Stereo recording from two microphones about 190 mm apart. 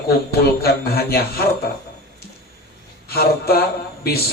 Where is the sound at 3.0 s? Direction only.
55° left (ahead or behind).